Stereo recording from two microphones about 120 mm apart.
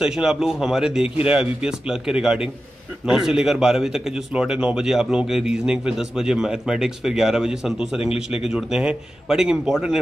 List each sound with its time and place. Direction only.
0.0 s a man's voice: 5° right (ahead or behind)
8.0 s a man's voice: 55° left (ahead or behind)
8.5 s speech: 5° right (ahead or behind)